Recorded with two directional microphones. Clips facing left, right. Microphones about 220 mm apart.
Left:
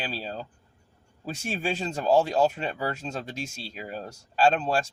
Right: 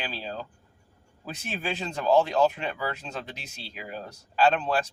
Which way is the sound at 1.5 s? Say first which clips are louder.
Left 3 dB; 40° left (ahead or behind).